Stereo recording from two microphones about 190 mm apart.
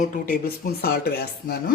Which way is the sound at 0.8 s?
55° left (ahead or behind).